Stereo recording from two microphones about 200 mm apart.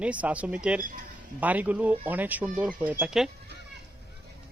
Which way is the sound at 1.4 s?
10° right (ahead or behind).